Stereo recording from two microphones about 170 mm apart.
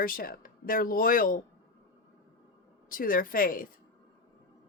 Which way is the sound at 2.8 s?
55° left (ahead or behind).